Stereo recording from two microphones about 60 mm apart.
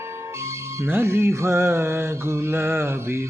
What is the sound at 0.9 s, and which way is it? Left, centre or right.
Music, right.